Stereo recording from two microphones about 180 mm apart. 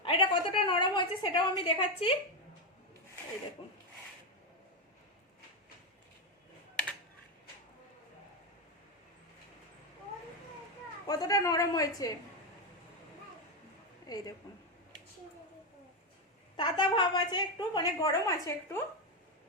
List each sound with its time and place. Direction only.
0.0 s a woman's voice: 30° left (ahead or behind)
11.0 s a woman's voice: 20° left (ahead or behind)
14.1 s a woman's voice: 20° left (ahead or behind)
16.6 s a woman's voice: 25° left (ahead or behind)